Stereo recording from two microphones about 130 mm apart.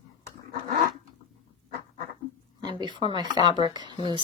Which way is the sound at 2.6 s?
35° right (ahead or behind).